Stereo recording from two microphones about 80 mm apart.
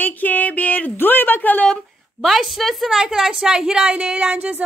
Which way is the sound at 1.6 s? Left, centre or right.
Centre.